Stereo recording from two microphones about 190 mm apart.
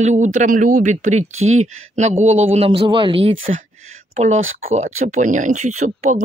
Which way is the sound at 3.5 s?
35° right (ahead or behind).